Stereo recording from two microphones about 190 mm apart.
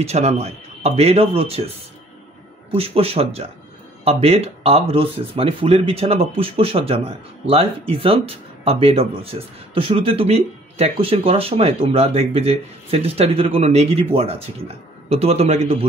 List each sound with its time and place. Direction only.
0.0 s speech: 35° right (ahead or behind)
2.7 s speech: 30° right (ahead or behind)